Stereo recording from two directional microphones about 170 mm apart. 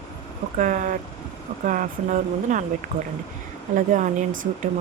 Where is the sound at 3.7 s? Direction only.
45° right (ahead or behind).